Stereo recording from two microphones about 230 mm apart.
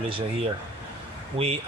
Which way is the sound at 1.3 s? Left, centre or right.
Right.